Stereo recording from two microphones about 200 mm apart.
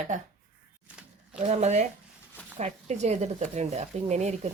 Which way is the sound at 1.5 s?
35° right (ahead or behind).